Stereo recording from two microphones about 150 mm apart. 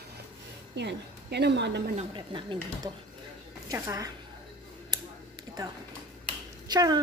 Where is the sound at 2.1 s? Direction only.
30° right (ahead or behind).